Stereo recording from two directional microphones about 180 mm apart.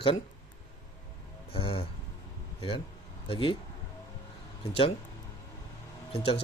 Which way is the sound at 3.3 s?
30° left (ahead or behind).